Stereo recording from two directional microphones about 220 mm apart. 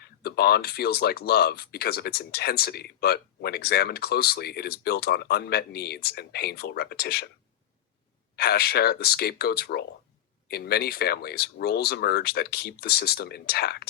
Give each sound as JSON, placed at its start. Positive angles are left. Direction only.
{"t": 0.2, "sound": "speech", "side_deg": 45}
{"t": 8.4, "sound": "speech", "side_deg": 45}